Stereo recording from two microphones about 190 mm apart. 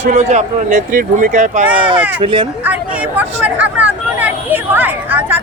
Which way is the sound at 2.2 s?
25° right (ahead or behind).